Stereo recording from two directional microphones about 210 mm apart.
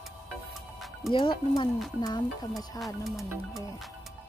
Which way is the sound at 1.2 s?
25° left (ahead or behind).